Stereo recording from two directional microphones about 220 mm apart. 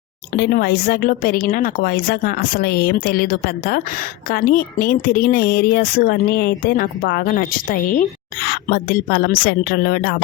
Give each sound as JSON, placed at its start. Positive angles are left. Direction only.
{"t": 0.3, "sound": "a woman's voice", "side_deg": 45}